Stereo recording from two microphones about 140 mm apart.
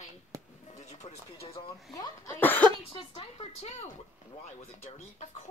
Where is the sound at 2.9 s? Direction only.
45° left (ahead or behind).